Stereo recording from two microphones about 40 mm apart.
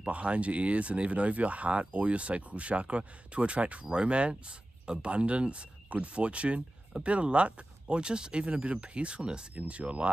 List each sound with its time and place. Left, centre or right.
0.0 s speech: right